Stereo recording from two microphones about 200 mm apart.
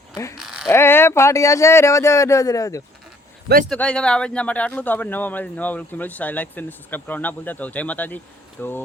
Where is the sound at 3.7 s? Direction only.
5° left (ahead or behind).